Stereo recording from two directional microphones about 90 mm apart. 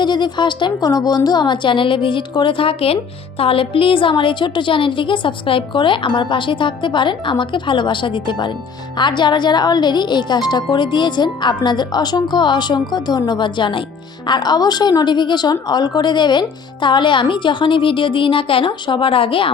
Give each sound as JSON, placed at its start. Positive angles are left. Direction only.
{"t": 0.0, "sound": "speech", "side_deg": 55}
{"t": 14.3, "sound": "speech", "side_deg": 50}